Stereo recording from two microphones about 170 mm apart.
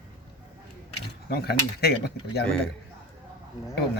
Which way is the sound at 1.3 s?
70° left (ahead or behind).